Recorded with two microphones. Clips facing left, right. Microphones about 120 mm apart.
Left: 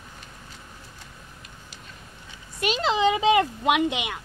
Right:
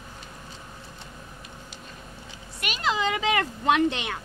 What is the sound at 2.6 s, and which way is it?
Speech, 25° left (ahead or behind).